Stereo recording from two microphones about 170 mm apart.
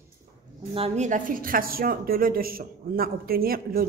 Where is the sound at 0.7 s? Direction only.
40° right (ahead or behind).